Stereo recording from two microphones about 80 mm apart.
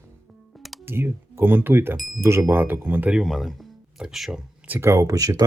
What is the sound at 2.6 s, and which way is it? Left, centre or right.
Speech, right.